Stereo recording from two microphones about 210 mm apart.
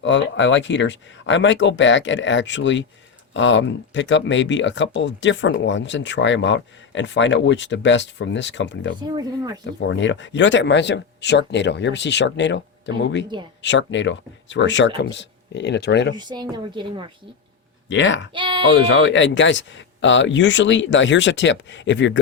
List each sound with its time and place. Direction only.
0.0 s speech: 60° left (ahead or behind)
9.1 s speech: 15° right (ahead or behind)
9.8 s speech: 60° left (ahead or behind)
16.1 s a woman's voice: 20° right (ahead or behind)
17.8 s speech: 60° left (ahead or behind)
18.3 s a woman's voice: 25° right (ahead or behind)
18.9 s speech: 60° left (ahead or behind)